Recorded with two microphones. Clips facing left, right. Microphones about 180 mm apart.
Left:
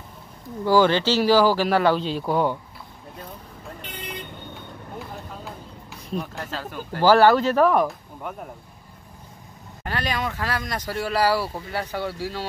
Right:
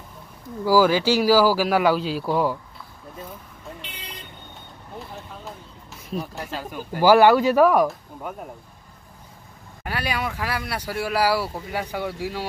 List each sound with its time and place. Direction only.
0.7 s speech: 5° right (ahead or behind)
4.9 s speech: centre (ahead or behind)
9.8 s speech: 10° right (ahead or behind)